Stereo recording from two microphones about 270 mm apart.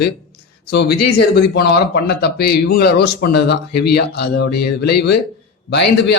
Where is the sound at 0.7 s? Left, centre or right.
Left.